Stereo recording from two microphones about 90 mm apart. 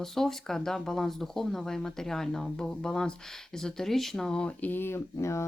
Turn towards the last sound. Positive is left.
turn(degrees=30)  # may be behind; listen again after turning